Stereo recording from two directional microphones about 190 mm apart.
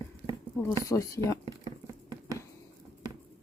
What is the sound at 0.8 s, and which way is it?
Speech, 15° left (ahead or behind).